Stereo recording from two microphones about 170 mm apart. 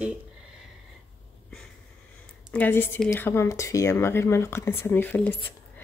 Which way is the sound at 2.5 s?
10° left (ahead or behind).